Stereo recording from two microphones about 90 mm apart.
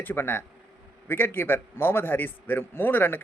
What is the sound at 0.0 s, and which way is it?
A man's voice, 25° left (ahead or behind).